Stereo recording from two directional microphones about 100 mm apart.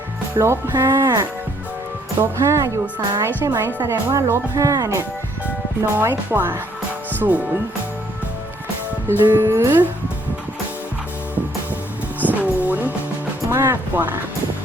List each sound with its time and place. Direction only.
0.3 s music: 25° right (ahead or behind)
2.2 s music: 30° right (ahead or behind)
3.2 s speech: 30° right (ahead or behind)
3.7 s music: 20° right (ahead or behind)
4.1 s speech: 30° right (ahead or behind)
6.0 s music: 20° right (ahead or behind)
7.2 s speech: 15° right (ahead or behind)
9.0 s music: 25° right (ahead or behind)
12.2 s vehicle: 15° right (ahead or behind)
13.5 s music: 20° right (ahead or behind)